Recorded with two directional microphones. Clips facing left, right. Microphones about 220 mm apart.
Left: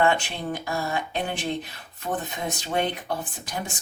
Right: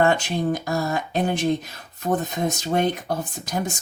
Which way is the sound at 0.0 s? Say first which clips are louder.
Right 3 dB; 40° right (ahead or behind).